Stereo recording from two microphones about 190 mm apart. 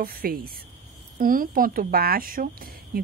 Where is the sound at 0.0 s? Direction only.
50° right (ahead or behind).